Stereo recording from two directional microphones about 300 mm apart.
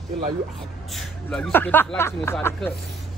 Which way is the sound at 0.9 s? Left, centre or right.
Centre.